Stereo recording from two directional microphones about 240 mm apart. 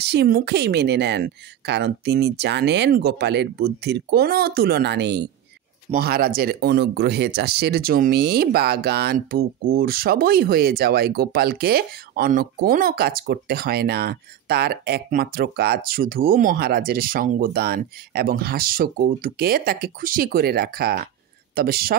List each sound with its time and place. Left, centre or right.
0.0 s speech: right